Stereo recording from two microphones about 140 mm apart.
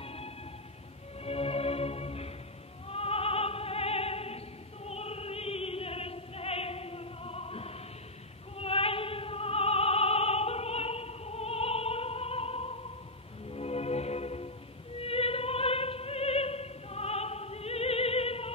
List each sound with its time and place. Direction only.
0.0 s music: 45° left (ahead or behind)
2.9 s opera: 45° left (ahead or behind)
13.5 s music: 45° left (ahead or behind)
15.0 s opera: 45° left (ahead or behind)